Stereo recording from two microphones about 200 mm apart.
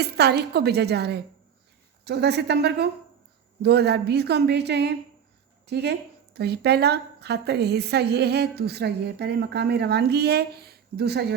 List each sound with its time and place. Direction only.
0.0 s a woman's voice: 55° right (ahead or behind)